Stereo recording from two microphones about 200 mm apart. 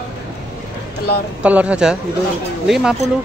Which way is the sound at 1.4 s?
5° right (ahead or behind).